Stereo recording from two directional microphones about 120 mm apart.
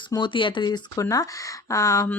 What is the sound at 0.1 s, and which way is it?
Speech, 40° left (ahead or behind).